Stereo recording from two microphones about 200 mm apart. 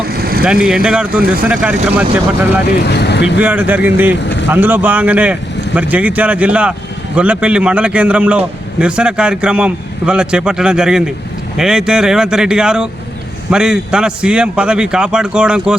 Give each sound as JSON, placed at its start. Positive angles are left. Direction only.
{"t": 0.0, "sound": "vehicle", "side_deg": -50}
{"t": 0.6, "sound": "a man's voice", "side_deg": -5}
{"t": 2.8, "sound": "speech", "side_deg": 55}
{"t": 3.4, "sound": "speech", "side_deg": -10}
{"t": 4.2, "sound": "vehicle", "side_deg": 60}
{"t": 4.4, "sound": "a man's voice", "side_deg": -10}